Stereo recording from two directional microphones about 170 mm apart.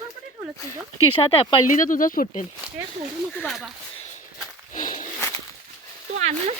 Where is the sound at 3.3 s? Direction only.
10° left (ahead or behind).